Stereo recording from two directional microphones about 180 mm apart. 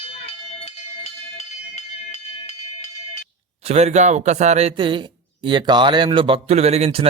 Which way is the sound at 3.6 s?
35° right (ahead or behind).